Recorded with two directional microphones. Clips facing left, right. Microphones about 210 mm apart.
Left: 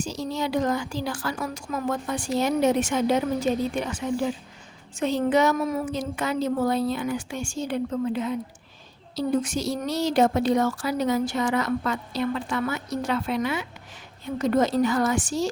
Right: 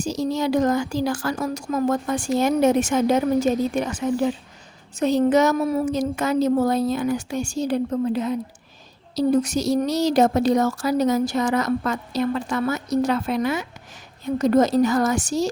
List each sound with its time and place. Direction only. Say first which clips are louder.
0.0 s a woman's voice: right 5 dB; 45° right (ahead or behind)